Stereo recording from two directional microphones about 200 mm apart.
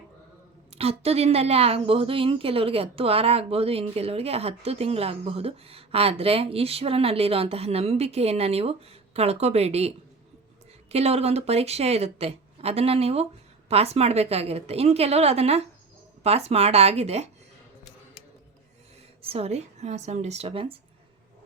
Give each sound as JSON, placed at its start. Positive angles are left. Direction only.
{"t": 0.8, "sound": "a woman's voice", "side_deg": -30}
{"t": 10.9, "sound": "speech", "side_deg": -30}
{"t": 19.2, "sound": "a woman's voice", "side_deg": -30}